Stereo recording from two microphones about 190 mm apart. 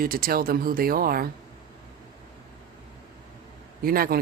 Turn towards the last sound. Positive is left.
turn(degrees=-50)  # may be behind; listen again after turning